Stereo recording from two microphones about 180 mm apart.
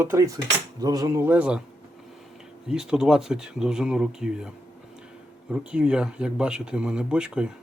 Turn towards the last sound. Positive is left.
turn(degrees=-5)  # may be behind; listen again after turning